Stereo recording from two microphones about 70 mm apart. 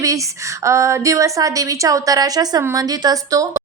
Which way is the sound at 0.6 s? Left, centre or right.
Right.